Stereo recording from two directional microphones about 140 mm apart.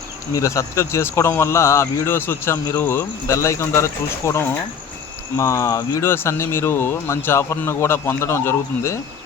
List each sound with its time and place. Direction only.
0.3 s speech: 20° left (ahead or behind)